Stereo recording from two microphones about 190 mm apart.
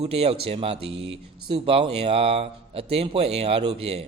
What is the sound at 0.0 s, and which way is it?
Speech, 30° right (ahead or behind).